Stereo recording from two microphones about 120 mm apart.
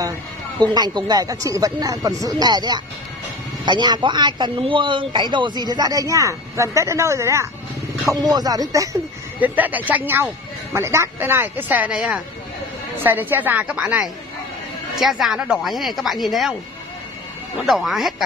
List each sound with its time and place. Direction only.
0.6 s a man's voice: 35° right (ahead or behind)
9.4 s speech: 15° right (ahead or behind)
13.0 s speech: 15° right (ahead or behind); by 16.5 s centre (ahead or behind)
17.6 s speech: centre (ahead or behind)